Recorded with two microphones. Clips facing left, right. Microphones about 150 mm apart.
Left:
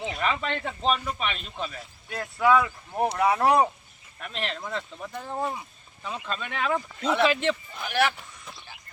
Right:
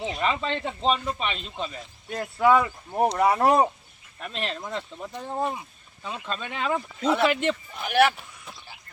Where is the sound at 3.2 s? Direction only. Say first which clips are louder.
Right 1 dB; 40° right (ahead or behind).